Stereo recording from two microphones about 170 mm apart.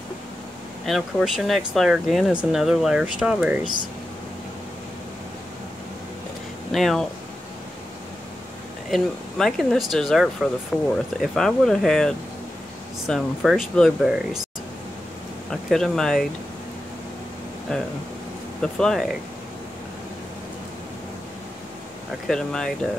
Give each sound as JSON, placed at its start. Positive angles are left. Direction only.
{"t": 0.8, "sound": "speech", "side_deg": 0}
{"t": 6.7, "sound": "speech", "side_deg": 0}
{"t": 8.9, "sound": "speech", "side_deg": 0}
{"t": 15.5, "sound": "speech", "side_deg": 0}
{"t": 18.6, "sound": "speech", "side_deg": 5}
{"t": 22.3, "sound": "speech", "side_deg": 5}